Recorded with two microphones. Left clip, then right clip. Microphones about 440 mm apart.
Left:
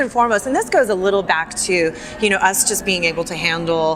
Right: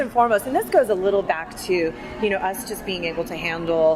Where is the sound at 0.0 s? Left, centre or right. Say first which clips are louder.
Left 2 dB; left.